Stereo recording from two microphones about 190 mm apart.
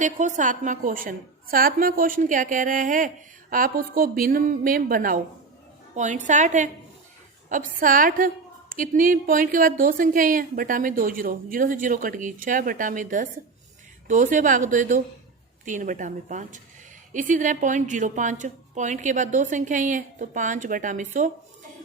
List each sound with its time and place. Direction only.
0.0 s a woman's voice: 40° right (ahead or behind)